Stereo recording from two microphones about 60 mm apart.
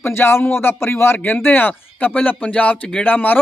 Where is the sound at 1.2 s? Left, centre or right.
Left.